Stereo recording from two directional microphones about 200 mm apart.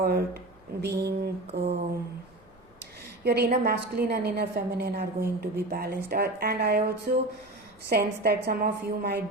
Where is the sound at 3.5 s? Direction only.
50° right (ahead or behind).